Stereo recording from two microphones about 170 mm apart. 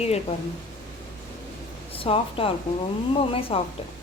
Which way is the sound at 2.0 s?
30° left (ahead or behind).